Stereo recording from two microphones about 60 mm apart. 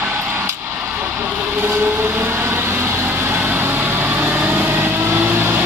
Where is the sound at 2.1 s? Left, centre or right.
Right.